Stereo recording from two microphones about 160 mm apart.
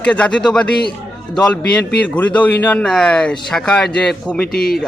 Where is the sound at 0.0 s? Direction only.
5° left (ahead or behind).